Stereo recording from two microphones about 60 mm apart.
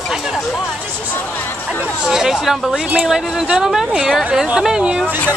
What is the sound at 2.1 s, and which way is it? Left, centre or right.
Speech, centre.